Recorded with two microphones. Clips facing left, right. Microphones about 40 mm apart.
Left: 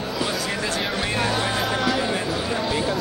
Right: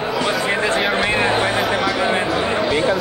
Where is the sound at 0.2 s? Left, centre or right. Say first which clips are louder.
Right 6 dB; right.